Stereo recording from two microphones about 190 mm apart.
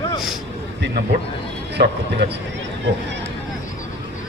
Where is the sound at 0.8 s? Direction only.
60° right (ahead or behind).